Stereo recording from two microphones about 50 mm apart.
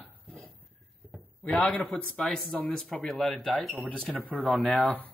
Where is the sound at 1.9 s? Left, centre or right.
Centre.